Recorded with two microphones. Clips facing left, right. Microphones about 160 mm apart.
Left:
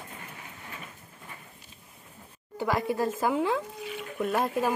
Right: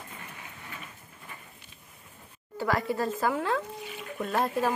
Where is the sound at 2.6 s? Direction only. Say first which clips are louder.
Left 1 dB; 15° left (ahead or behind).